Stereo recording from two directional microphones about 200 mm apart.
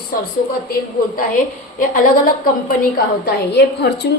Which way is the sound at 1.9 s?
45° left (ahead or behind).